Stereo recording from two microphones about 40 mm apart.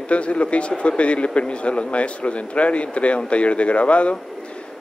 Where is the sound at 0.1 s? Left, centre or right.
Left.